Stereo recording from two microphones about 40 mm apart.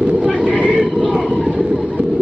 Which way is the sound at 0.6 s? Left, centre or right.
Right.